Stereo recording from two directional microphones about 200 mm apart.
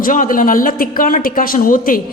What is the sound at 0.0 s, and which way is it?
A man's voice, 40° left (ahead or behind).